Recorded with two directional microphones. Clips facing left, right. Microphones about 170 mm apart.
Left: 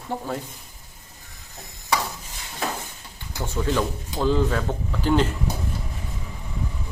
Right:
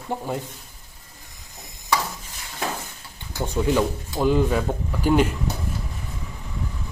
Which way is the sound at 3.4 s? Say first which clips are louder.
Right 3 dB; 15° right (ahead or behind).